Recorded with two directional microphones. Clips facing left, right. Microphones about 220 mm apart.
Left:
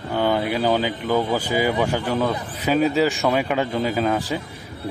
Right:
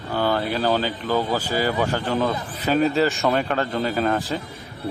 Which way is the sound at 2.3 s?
10° left (ahead or behind).